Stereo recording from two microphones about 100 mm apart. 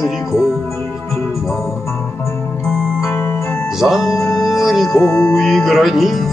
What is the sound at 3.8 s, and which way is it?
Music, centre (ahead or behind).